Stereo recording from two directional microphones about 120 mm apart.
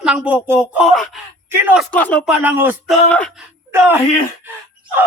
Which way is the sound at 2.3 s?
15° right (ahead or behind).